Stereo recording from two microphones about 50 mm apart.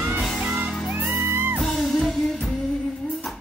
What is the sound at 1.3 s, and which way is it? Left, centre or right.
Music, right.